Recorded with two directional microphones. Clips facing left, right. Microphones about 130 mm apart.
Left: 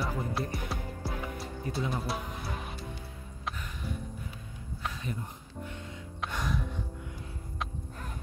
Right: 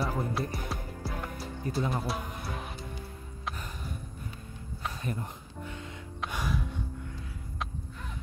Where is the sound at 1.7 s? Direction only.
40° right (ahead or behind).